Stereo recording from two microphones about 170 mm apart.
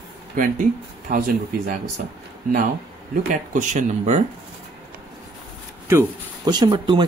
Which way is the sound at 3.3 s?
50° right (ahead or behind).